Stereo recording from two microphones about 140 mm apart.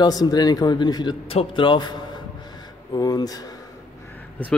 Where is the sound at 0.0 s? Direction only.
30° left (ahead or behind).